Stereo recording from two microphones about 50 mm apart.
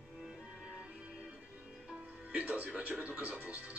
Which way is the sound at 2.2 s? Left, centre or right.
Right.